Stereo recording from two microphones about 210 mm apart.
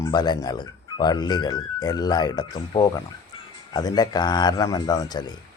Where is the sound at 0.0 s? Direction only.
20° left (ahead or behind).